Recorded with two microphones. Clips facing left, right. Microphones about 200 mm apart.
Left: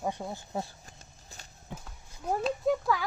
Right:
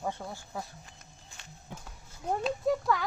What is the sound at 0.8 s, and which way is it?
Walk, 40° left (ahead or behind).